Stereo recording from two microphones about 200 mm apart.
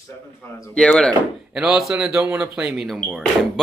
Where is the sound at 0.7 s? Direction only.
5° left (ahead or behind).